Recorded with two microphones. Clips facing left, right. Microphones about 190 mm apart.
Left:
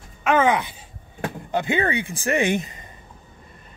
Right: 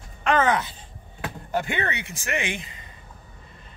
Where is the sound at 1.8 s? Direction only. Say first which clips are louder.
Left 6 dB; 30° left (ahead or behind).